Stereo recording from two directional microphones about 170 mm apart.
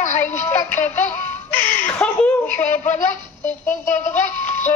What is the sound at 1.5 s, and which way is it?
Chuckle, 10° left (ahead or behind).